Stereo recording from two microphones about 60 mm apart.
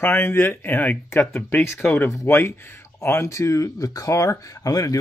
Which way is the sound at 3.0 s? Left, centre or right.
Left.